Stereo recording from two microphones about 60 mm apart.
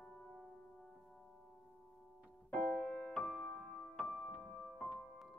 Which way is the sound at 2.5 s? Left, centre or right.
Left.